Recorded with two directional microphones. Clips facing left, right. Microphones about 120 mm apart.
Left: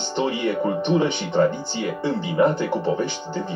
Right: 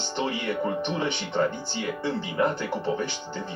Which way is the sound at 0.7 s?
15° left (ahead or behind).